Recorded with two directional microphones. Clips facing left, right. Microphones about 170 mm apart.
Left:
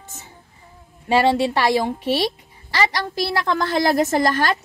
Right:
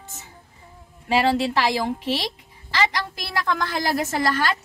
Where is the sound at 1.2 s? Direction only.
25° left (ahead or behind).